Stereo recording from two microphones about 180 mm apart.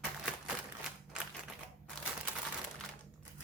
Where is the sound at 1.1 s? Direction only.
5° right (ahead or behind).